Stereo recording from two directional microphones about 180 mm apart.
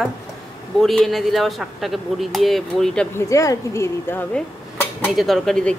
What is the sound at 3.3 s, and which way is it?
Speech, 15° left (ahead or behind).